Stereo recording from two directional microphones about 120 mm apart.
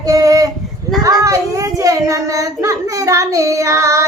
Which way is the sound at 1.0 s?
25° right (ahead or behind).